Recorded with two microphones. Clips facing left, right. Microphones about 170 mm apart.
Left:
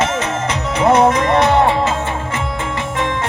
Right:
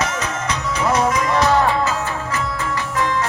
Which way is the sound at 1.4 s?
25° left (ahead or behind).